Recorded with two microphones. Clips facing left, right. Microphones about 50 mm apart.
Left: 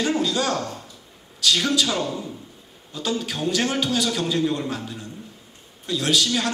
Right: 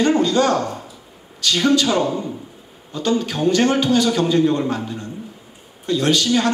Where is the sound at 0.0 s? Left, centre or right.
Centre.